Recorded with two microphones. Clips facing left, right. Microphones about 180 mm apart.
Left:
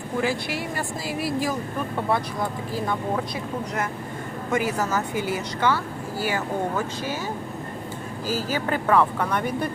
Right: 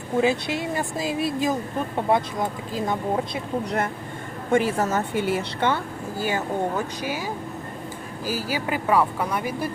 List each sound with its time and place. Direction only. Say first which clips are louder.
0.2 s speech: right 4 dB; 20° right (ahead or behind)
4.5 s speech: right 3 dB; 30° right (ahead or behind)
8.3 s speech: left 1 dB; 10° right (ahead or behind)